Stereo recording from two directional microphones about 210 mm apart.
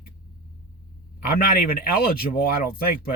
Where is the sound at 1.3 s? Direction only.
45° left (ahead or behind).